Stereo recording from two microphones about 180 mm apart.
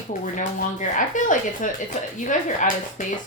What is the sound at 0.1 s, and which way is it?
Speech, 45° left (ahead or behind).